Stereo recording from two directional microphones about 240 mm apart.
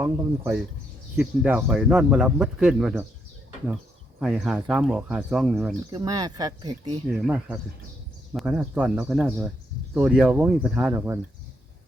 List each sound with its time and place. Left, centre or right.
0.0 s speech: centre
4.2 s speech: centre
5.9 s speech: centre
7.1 s speech: centre